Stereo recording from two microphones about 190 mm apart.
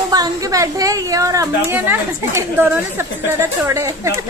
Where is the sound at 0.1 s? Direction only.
20° right (ahead or behind).